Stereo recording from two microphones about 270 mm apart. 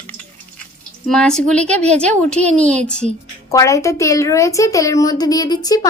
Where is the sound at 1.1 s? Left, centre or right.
Centre.